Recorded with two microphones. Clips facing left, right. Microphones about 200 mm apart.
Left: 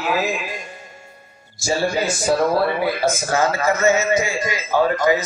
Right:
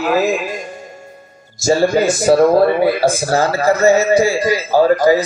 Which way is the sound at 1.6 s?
45° right (ahead or behind).